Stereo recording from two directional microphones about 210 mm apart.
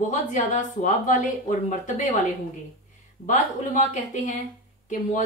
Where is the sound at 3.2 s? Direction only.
35° left (ahead or behind).